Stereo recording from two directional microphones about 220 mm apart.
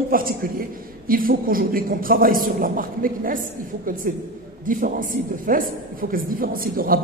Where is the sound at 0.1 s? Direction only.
40° right (ahead or behind).